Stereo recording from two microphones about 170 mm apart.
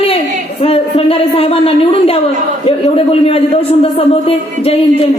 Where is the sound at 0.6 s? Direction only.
35° left (ahead or behind).